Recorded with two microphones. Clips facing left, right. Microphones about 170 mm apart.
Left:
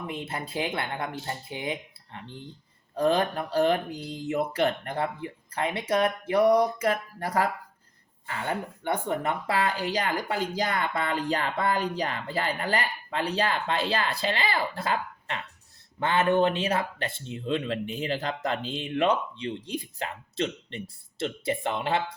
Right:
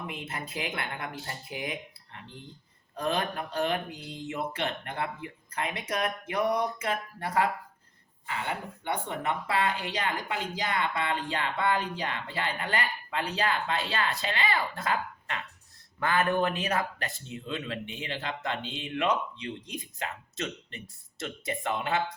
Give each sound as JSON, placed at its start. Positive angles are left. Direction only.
{"t": 0.1, "sound": "speech", "side_deg": 30}
{"t": 2.9, "sound": "speech", "side_deg": 30}